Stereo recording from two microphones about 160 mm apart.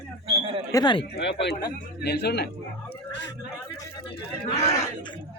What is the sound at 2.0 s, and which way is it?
Speech, 90° left.